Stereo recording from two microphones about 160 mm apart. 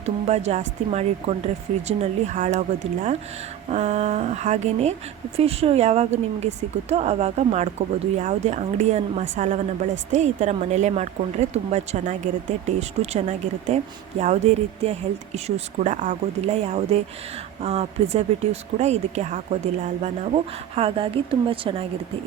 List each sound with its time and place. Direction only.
0.0 s a woman's voice: 45° right (ahead or behind)